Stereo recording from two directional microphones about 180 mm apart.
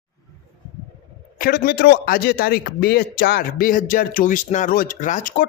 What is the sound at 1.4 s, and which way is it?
A man's voice, 55° left (ahead or behind).